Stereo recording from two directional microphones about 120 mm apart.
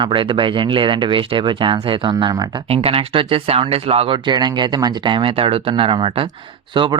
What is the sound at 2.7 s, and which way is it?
Speech, 55° right (ahead or behind).